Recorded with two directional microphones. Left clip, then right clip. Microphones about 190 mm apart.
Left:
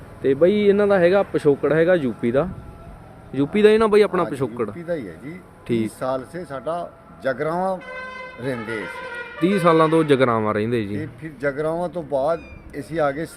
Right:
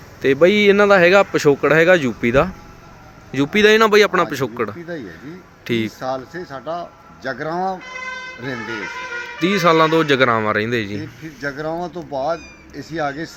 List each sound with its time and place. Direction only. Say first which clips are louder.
0.2 s speech: right 4 dB; 10° right (ahead or behind)
6.0 s speech: even; 35° left (ahead or behind)
9.4 s speech: right 2 dB; 10° left (ahead or behind)
11.3 s speech: left 1 dB; 35° left (ahead or behind)